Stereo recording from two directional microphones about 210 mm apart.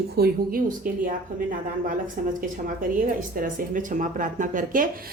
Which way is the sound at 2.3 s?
40° right (ahead or behind).